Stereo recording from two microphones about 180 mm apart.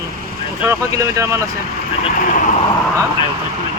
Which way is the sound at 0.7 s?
15° right (ahead or behind).